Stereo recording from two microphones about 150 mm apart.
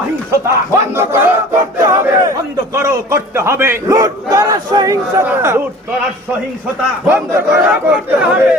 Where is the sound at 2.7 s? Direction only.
20° right (ahead or behind).